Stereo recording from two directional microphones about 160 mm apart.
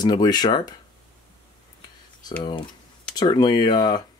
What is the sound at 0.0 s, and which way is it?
Speech, 25° left (ahead or behind).